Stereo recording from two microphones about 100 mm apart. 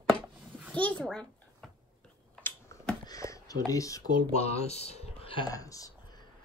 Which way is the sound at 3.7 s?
35° left (ahead or behind).